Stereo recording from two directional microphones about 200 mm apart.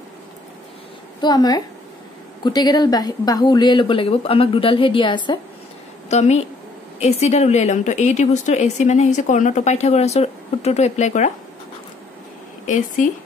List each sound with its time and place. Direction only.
1.2 s speech: 20° left (ahead or behind)
6.0 s a woman's voice: 35° left (ahead or behind)
12.6 s a woman's voice: 40° left (ahead or behind)